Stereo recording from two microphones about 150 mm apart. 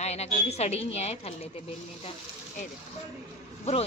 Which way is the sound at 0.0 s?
45° left (ahead or behind).